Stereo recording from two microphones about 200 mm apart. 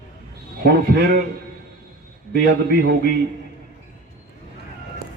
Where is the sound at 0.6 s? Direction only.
55° right (ahead or behind).